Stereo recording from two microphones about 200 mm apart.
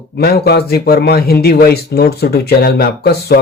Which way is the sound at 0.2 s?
50° left (ahead or behind).